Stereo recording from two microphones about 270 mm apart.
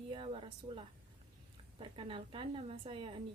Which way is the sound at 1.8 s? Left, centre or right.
Centre.